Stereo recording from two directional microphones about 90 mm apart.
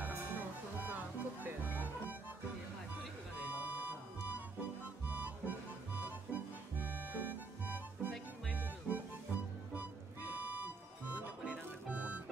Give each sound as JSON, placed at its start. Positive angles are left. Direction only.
{"t": 0.7, "sound": "music", "side_deg": -20}
{"t": 3.3, "sound": "music", "side_deg": -20}